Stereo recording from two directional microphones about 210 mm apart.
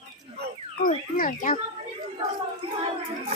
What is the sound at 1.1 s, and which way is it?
Children playing, 40° left (ahead or behind).